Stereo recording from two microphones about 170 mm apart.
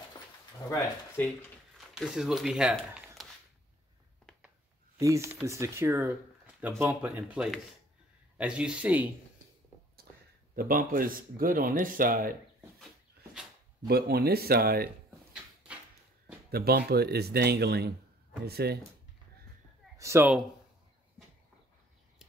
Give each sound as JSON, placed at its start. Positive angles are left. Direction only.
{"t": 0.7, "sound": "speech", "side_deg": 15}
{"t": 2.0, "sound": "speech", "side_deg": 0}
{"t": 4.9, "sound": "speech", "side_deg": -15}
{"t": 10.5, "sound": "speech", "side_deg": -55}
{"t": 13.8, "sound": "speech", "side_deg": -70}
{"t": 16.4, "sound": "speech", "side_deg": -65}
{"t": 20.0, "sound": "speech", "side_deg": -15}